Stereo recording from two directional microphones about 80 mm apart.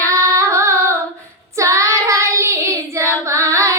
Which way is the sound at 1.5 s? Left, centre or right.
Right.